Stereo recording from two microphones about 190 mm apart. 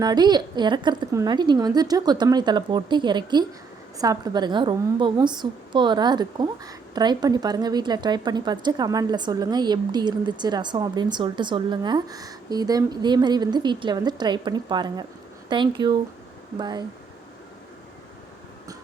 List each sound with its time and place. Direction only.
0.0 s a woman's voice: 20° right (ahead or behind)